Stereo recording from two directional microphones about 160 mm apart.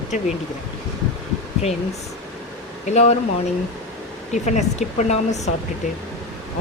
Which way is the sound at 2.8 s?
45° left (ahead or behind).